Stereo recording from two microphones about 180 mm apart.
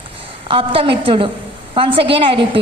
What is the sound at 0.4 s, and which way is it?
A woman's voice, 30° right (ahead or behind).